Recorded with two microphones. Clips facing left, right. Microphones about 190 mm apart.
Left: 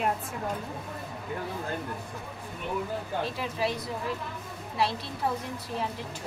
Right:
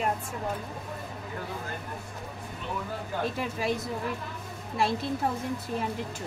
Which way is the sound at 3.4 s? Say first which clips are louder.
Right 1 dB; 45° right (ahead or behind).